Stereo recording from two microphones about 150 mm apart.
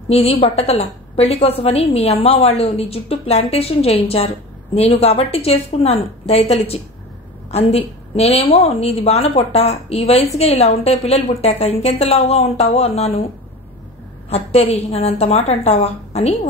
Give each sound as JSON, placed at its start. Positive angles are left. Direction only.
{"t": 0.1, "sound": "a woman's voice", "side_deg": 40}
{"t": 14.3, "sound": "a woman's voice", "side_deg": 45}